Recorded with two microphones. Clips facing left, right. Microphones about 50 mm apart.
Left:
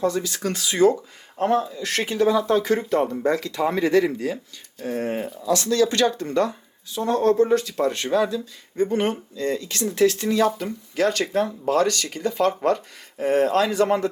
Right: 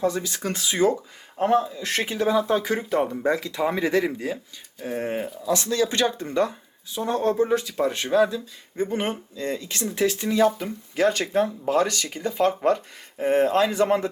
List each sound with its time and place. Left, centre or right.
0.0 s speech: right
1.4 s speech: centre
1.8 s speech: right